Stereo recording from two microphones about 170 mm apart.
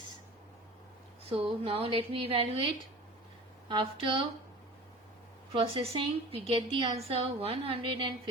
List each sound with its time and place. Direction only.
1.2 s a woman's voice: 35° right (ahead or behind)
3.7 s a woman's voice: 30° right (ahead or behind)
5.5 s a woman's voice: 35° right (ahead or behind)